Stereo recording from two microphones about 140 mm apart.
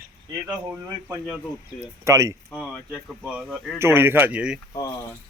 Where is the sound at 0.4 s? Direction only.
15° right (ahead or behind).